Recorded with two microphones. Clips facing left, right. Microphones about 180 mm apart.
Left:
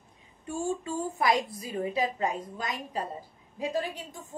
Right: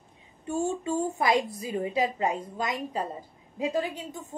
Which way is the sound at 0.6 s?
25° right (ahead or behind).